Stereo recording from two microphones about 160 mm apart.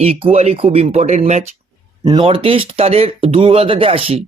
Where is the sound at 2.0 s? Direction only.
30° right (ahead or behind).